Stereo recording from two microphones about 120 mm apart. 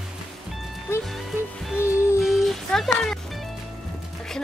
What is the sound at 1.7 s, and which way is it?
Music, 25° left (ahead or behind).